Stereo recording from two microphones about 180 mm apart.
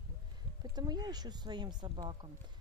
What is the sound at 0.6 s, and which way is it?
Speech, 20° right (ahead or behind).